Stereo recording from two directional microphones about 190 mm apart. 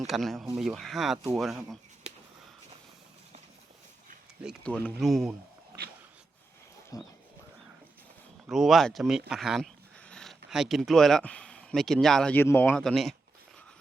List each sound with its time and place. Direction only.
0.1 s speech: centre (ahead or behind)
4.4 s speech: 5° left (ahead or behind)
6.9 s speech: 20° left (ahead or behind)
8.4 s speech: centre (ahead or behind)